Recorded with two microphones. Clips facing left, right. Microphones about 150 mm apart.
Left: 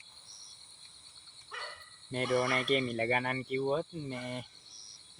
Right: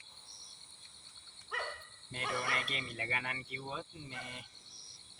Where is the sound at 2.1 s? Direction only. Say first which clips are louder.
Left 9 dB; 50° left (ahead or behind).